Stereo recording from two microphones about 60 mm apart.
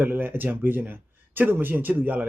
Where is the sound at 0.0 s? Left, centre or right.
Right.